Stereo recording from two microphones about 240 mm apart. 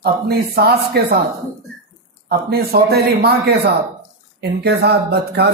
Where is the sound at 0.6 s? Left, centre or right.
Right.